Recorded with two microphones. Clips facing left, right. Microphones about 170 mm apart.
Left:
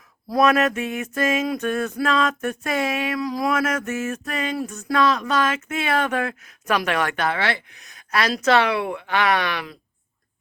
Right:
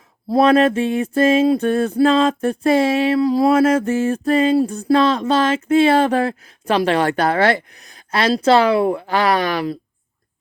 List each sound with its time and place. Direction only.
0.3 s mantra: 30° right (ahead or behind)